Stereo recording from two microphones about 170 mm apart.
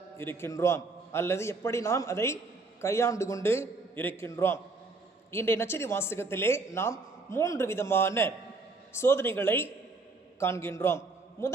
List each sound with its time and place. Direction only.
0.2 s a man's voice: 15° left (ahead or behind)